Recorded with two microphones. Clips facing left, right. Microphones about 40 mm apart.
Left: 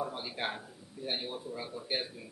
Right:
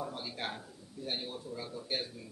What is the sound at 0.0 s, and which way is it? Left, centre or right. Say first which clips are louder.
A man's voice: left 3 dB; centre.